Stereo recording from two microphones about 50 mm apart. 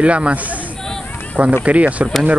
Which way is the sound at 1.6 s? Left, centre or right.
Right.